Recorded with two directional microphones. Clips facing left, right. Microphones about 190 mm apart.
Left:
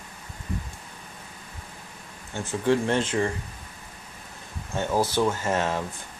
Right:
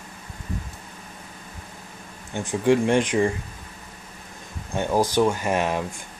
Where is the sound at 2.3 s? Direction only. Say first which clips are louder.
Right 4 dB; 15° right (ahead or behind).